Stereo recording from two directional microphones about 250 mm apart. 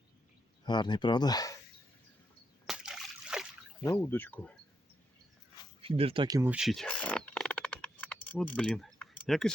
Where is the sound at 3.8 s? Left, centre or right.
Centre.